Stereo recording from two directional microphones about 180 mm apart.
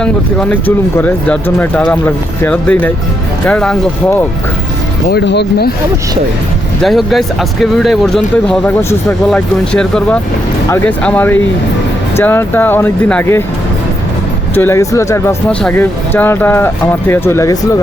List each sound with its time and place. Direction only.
0.0 s speech: 5° left (ahead or behind)
5.0 s speech: 65° left (ahead or behind)
6.8 s speech: centre (ahead or behind)
14.5 s speech: 10° left (ahead or behind)